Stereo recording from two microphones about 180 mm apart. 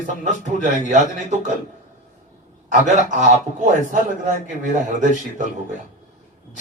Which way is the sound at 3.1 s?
40° right (ahead or behind).